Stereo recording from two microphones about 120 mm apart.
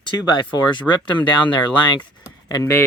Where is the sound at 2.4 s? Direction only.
25° left (ahead or behind).